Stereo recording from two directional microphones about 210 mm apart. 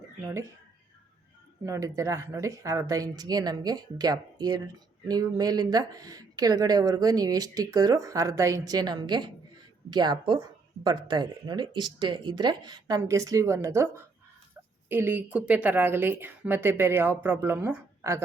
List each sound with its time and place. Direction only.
0.2 s speech: 10° right (ahead or behind)
1.6 s speech: 15° right (ahead or behind)